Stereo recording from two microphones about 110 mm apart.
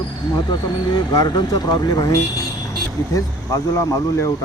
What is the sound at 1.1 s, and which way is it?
Speech, 40° left (ahead or behind).